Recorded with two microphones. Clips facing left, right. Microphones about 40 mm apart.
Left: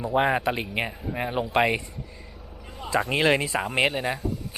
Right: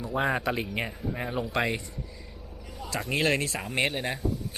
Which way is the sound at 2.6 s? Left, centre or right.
Left.